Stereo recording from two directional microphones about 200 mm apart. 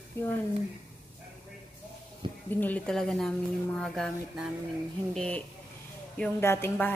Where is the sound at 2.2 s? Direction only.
25° right (ahead or behind).